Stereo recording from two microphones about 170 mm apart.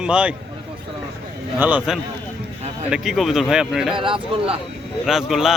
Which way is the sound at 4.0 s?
30° right (ahead or behind).